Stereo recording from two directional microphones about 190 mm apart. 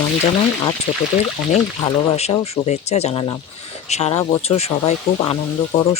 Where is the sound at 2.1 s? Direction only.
35° left (ahead or behind).